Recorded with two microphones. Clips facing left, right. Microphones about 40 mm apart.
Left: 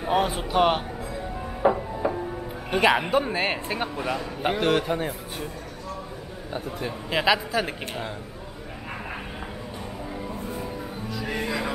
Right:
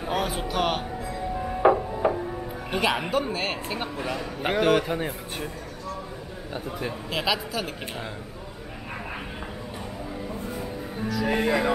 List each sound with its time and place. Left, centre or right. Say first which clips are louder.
0.0 s a man's voice: left 3 dB; centre
1.7 s music: right 3 dB; centre
2.7 s a man's voice: left 4 dB; centre
6.5 s a man's voice: left 1 dB; centre
11.2 s music: right 5 dB; centre